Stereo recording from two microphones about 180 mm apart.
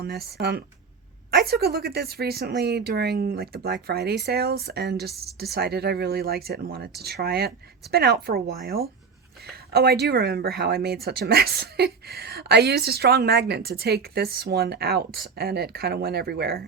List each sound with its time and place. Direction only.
0.0 s a woman's voice: 60° right (ahead or behind)